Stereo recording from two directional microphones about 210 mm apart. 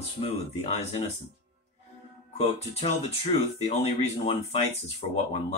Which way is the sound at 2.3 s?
30° left (ahead or behind).